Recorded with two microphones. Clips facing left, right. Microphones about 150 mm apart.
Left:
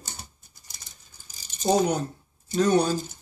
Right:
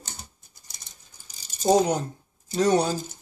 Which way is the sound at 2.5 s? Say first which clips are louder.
Even; 35° right (ahead or behind).